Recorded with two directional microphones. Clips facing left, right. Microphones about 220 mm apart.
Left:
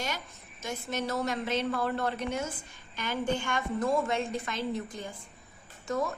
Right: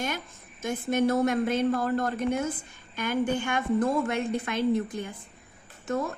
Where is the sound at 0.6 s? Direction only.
55° right (ahead or behind).